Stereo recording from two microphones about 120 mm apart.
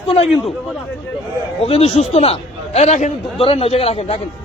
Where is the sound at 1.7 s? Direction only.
60° left (ahead or behind).